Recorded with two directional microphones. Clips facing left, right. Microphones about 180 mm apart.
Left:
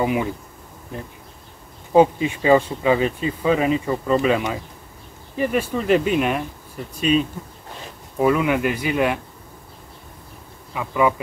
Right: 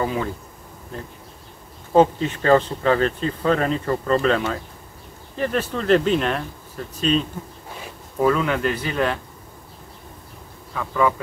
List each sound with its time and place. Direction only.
0.0 s speech: 15° left (ahead or behind)
1.9 s speech: 10° left (ahead or behind)
10.7 s speech: 10° left (ahead or behind)